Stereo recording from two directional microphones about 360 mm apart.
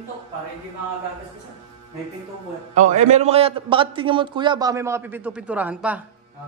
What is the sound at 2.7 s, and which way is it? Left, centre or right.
A man's voice, centre.